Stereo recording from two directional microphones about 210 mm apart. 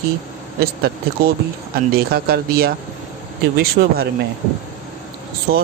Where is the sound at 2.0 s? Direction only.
45° right (ahead or behind).